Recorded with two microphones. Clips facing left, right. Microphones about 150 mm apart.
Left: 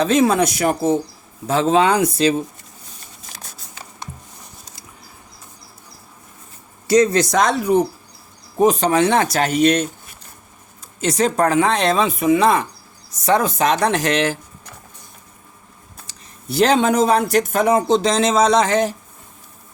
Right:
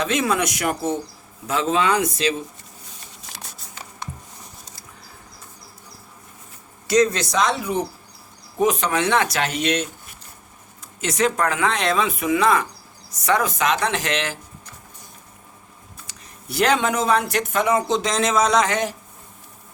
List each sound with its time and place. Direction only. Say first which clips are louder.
0.0 s speech: left 6 dB; 30° left (ahead or behind)
6.8 s speech: left 4 dB; 35° left (ahead or behind)
7.3 s speech: left 5 dB; 45° left (ahead or behind)
8.5 s speech: left 5 dB; 35° left (ahead or behind)
11.0 s speech: left 4 dB; 35° left (ahead or behind)
16.0 s speech: left 7 dB; 30° left (ahead or behind)